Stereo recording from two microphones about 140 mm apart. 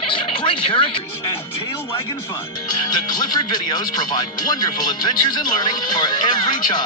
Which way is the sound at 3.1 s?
30° left (ahead or behind).